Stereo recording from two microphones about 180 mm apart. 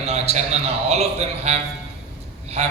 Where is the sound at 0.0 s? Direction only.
35° right (ahead or behind).